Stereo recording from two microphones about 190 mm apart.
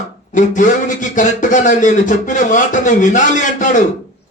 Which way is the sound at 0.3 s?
40° left (ahead or behind).